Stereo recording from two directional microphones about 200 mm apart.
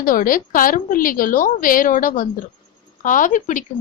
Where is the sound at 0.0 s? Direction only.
45° left (ahead or behind).